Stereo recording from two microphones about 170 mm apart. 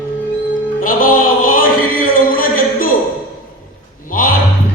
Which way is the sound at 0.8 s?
55° left (ahead or behind).